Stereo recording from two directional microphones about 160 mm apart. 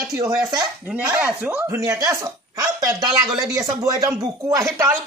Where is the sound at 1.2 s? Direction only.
5° right (ahead or behind).